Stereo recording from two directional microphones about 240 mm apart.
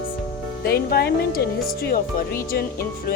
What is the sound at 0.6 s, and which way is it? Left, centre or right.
Speech, left.